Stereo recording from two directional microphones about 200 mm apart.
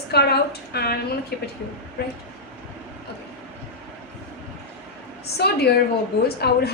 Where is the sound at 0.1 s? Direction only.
55° left (ahead or behind).